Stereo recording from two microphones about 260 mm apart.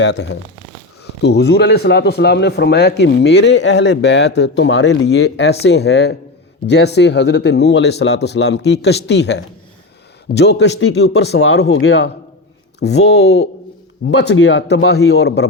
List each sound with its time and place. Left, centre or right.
0.0 s speech: left